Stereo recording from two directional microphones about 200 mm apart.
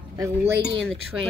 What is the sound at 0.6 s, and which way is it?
Cutlery, 65° right (ahead or behind).